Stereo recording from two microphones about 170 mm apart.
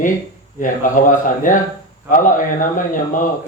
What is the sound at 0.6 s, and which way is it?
A man's voice, 50° left (ahead or behind).